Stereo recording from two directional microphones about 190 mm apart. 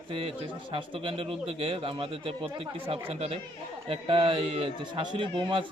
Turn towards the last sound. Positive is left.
turn(degrees=-25)  # may be behind; listen again after turning